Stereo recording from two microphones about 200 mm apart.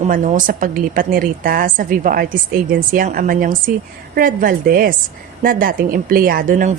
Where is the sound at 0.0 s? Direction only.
40° right (ahead or behind).